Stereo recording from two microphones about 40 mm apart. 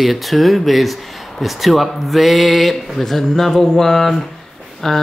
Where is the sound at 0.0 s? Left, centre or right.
Centre.